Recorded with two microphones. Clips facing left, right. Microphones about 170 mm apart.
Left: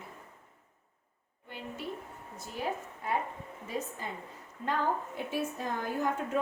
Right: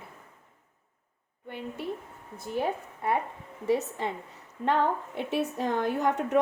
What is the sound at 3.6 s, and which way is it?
A woman's voice, 75° right (ahead or behind).